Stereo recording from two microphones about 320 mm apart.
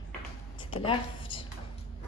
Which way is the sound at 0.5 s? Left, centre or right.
Centre.